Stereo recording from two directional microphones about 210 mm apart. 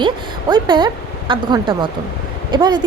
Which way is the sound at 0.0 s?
20° right (ahead or behind).